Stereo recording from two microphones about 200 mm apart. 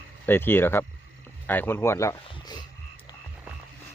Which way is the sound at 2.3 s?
20° left (ahead or behind).